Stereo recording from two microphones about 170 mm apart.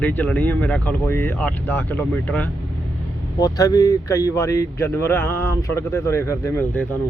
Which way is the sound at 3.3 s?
20° left (ahead or behind).